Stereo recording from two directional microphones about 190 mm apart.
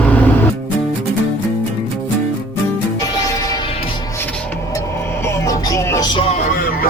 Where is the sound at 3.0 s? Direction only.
20° left (ahead or behind).